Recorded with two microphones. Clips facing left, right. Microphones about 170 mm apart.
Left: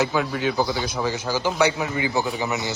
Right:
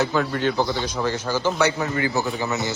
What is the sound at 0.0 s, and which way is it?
A man's voice, 10° left (ahead or behind).